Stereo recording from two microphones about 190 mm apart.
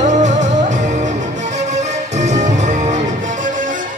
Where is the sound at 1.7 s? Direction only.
40° right (ahead or behind).